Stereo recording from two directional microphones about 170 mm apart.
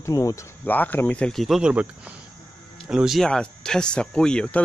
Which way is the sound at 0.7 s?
10° left (ahead or behind).